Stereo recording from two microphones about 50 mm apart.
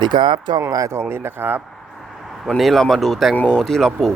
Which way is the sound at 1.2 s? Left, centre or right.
Right.